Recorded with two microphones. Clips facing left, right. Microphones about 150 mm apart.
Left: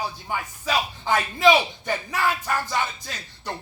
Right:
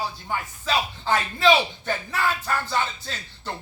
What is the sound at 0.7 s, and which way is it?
A man's voice, 15° left (ahead or behind).